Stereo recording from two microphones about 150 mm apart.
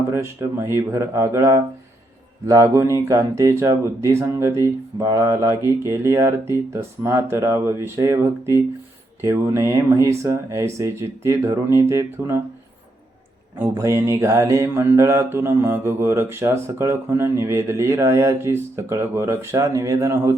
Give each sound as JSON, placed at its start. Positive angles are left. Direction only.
{"t": 0.1, "sound": "mantra", "side_deg": -15}
{"t": 2.5, "sound": "speech", "side_deg": -20}
{"t": 5.8, "sound": "mantra", "side_deg": -20}
{"t": 9.2, "sound": "speech", "side_deg": -20}
{"t": 13.6, "sound": "mantra", "side_deg": -20}